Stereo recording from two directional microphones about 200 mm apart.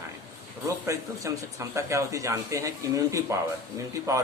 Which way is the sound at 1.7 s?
15° right (ahead or behind).